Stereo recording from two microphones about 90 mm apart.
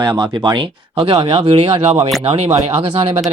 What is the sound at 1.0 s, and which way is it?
Speech, 65° right (ahead or behind).